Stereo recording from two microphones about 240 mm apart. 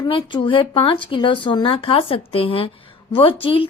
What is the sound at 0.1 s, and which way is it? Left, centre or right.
A woman's voice, left.